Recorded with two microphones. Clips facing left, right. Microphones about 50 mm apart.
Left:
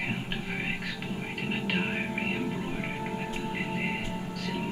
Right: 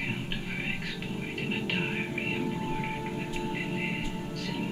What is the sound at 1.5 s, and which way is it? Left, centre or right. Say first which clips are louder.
Speech: left 2 dB; centre.